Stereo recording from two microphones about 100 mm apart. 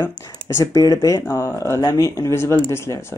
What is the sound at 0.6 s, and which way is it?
Speech, 35° left (ahead or behind).